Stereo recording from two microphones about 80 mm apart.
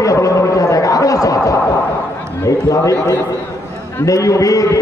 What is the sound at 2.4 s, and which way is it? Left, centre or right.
A man's voice, left.